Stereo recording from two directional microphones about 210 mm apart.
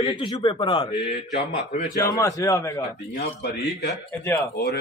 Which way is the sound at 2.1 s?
15° left (ahead or behind).